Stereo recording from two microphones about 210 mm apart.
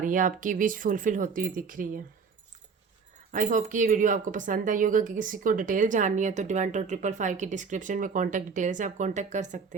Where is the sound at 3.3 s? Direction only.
35° right (ahead or behind).